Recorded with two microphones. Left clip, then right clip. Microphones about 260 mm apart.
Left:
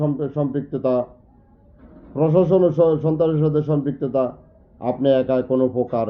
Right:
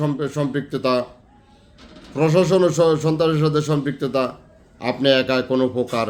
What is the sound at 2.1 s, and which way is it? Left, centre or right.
Speech, centre.